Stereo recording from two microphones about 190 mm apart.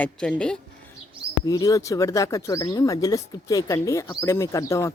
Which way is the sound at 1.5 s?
20° left (ahead or behind).